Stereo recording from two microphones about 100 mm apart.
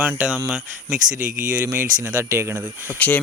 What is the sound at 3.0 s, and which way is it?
Speech, 15° left (ahead or behind).